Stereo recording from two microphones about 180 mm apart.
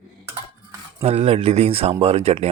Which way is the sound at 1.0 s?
35° right (ahead or behind).